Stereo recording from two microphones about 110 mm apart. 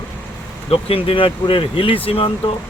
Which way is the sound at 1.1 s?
55° left (ahead or behind).